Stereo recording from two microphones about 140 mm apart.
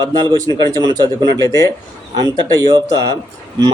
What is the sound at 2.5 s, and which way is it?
Speech, 25° right (ahead or behind).